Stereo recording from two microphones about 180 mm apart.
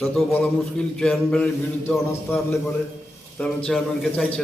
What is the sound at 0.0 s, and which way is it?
A man's voice, 5° left (ahead or behind).